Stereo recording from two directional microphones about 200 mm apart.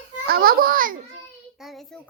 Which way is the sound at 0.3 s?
50° right (ahead or behind).